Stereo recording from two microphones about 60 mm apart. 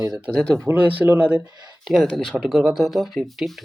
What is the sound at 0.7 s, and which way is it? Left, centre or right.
Speech, right.